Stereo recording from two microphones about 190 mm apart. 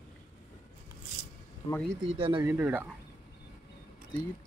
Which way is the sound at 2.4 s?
10° right (ahead or behind).